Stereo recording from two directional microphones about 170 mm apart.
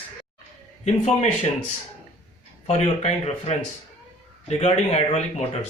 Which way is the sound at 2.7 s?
35° left (ahead or behind).